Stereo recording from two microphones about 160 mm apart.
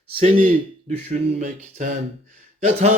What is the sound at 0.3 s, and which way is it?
Speech, 50° right (ahead or behind).